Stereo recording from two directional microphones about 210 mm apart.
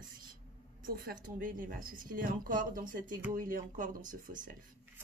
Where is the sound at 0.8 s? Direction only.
45° right (ahead or behind).